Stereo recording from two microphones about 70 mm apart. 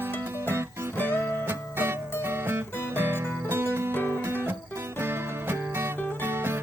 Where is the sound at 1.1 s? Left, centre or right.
Right.